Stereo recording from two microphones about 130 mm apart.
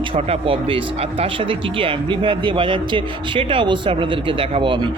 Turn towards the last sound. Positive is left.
turn(degrees=-40)  # may be behind; listen again after turning